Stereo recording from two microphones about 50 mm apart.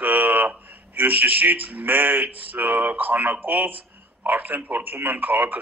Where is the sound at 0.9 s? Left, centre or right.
Right.